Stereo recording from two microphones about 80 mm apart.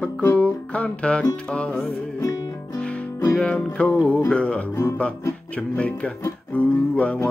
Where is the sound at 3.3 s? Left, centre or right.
Centre.